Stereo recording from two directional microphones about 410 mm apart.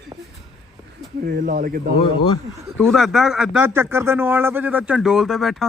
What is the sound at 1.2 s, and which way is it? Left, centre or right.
Speech, right.